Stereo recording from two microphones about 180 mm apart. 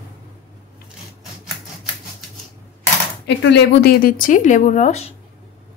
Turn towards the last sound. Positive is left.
turn(degrees=40)  # may be behind; listen again after turning